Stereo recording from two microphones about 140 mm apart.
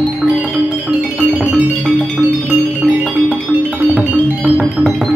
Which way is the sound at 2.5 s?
10° right (ahead or behind).